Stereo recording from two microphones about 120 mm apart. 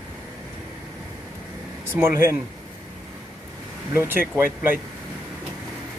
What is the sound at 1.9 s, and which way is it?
Speech, 20° right (ahead or behind).